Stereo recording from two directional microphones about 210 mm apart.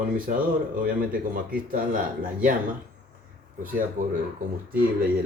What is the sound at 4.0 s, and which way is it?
Speech, 40° right (ahead or behind).